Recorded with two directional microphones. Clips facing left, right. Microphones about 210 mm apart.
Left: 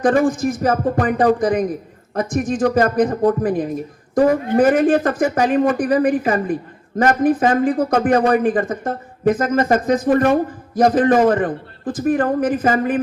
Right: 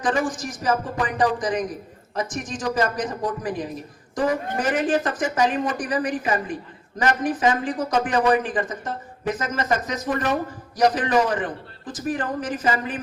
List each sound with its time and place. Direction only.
0.0 s a man's voice: 60° left (ahead or behind)